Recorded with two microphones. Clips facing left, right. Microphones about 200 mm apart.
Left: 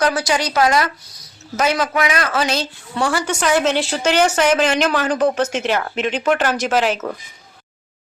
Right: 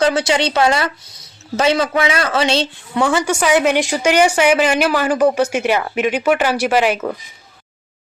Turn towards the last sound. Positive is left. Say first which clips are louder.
# right 3 dB
turn(degrees=-10)  # may be behind; listen again after turning